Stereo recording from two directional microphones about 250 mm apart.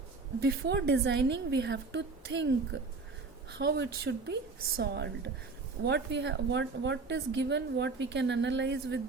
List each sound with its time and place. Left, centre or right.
0.3 s a woman's voice: right